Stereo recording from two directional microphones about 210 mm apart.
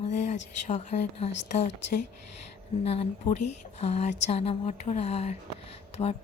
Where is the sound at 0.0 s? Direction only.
35° left (ahead or behind).